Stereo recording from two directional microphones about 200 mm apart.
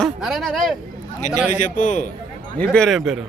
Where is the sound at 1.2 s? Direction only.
40° left (ahead or behind).